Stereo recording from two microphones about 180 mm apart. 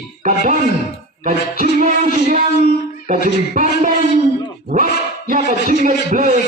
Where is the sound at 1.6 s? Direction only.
45° right (ahead or behind).